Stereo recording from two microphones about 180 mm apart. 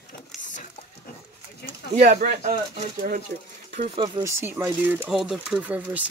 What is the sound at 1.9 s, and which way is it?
Speech, 50° right (ahead or behind).